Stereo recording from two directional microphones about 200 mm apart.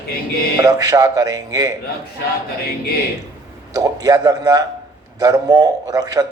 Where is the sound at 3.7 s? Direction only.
15° right (ahead or behind).